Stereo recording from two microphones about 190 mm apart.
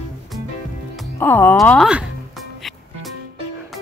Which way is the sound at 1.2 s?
10° left (ahead or behind).